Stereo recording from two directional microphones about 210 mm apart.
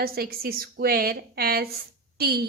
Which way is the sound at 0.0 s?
45° right (ahead or behind).